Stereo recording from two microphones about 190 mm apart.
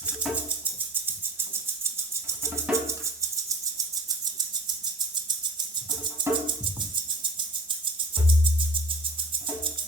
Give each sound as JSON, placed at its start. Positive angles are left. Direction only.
{"t": 0.0, "sound": "music", "side_deg": -10}
{"t": 1.8, "sound": "music", "side_deg": -15}
{"t": 6.2, "sound": "music", "side_deg": -25}